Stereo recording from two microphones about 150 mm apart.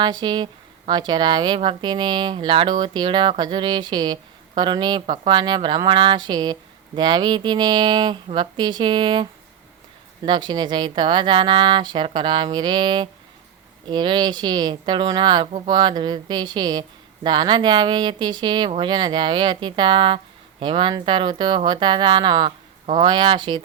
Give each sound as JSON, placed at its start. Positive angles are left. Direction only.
{"t": 0.0, "sound": "speech", "side_deg": -30}
{"t": 10.2, "sound": "speech", "side_deg": -30}